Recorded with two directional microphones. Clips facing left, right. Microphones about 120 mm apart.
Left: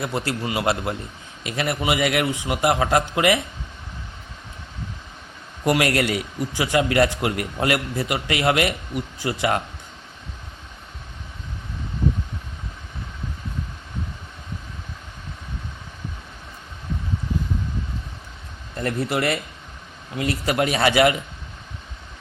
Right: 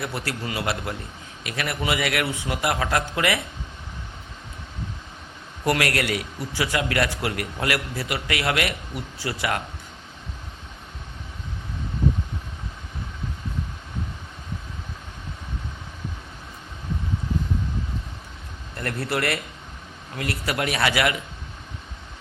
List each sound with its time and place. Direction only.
0.0 s a man's voice: 25° left (ahead or behind)
5.6 s a man's voice: 20° left (ahead or behind)
18.8 s a man's voice: 20° left (ahead or behind)